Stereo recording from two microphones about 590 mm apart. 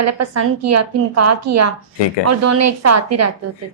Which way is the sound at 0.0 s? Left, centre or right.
Right.